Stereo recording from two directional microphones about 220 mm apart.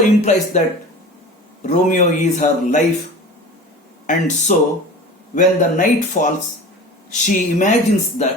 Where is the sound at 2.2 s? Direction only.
35° left (ahead or behind).